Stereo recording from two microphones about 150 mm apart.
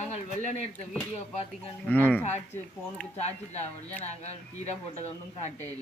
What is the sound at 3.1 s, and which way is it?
Speech, 45° left (ahead or behind).